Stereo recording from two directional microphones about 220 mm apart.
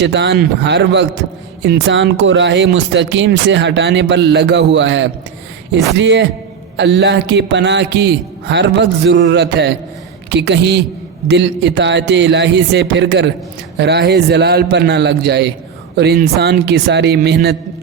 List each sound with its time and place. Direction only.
0.0 s speech: 55° right (ahead or behind)